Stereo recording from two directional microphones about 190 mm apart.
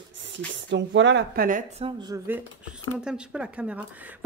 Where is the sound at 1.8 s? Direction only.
25° right (ahead or behind).